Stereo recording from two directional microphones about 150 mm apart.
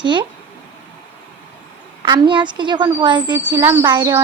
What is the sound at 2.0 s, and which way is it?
Speech, 30° right (ahead or behind).